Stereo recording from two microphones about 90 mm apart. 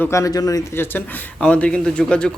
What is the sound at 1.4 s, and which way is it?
Speech, 15° left (ahead or behind).